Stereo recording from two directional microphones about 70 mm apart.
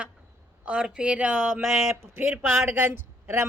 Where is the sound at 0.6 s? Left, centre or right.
Centre.